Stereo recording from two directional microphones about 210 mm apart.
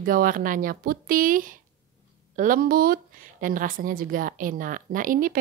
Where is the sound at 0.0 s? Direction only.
40° right (ahead or behind).